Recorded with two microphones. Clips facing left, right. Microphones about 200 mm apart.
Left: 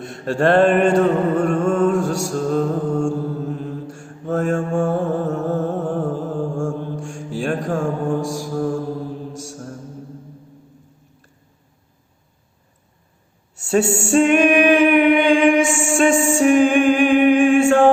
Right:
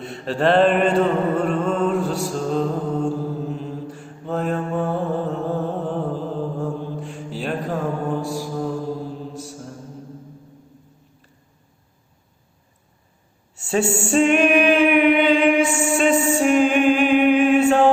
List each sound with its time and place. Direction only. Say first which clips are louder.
0.0 s mantra: left 2 dB; 45° left (ahead or behind)
9.5 s music: left 2 dB; 50° left (ahead or behind)
13.6 s a sound: left 4 dB; 40° left (ahead or behind)
13.9 s singing: left 1 dB; 40° left (ahead or behind)
15.6 s music: even; 90° left
16.3 s mantra: left 3 dB; 45° left (ahead or behind)
17.7 s music: left 2 dB; 45° left (ahead or behind)